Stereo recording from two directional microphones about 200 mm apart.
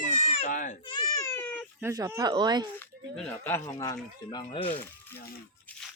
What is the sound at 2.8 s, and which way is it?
Speech, 10° left (ahead or behind).